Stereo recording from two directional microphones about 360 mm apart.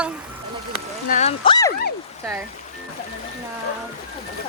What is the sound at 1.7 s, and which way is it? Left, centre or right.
Dog, left.